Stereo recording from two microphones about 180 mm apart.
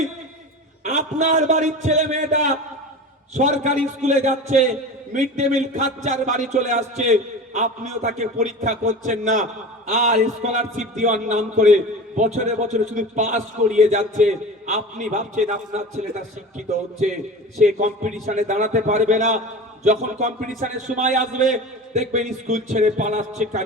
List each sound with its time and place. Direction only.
0.9 s a man's voice: 45° right (ahead or behind)
17.6 s a man's voice: 40° right (ahead or behind)